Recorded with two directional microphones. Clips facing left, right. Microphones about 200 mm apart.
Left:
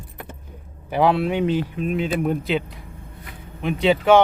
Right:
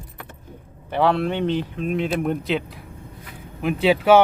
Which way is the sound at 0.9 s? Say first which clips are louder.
Left 1 dB; 10° left (ahead or behind).